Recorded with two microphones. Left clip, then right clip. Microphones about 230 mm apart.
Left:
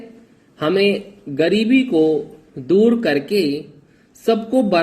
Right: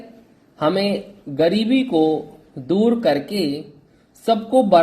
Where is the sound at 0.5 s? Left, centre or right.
Centre.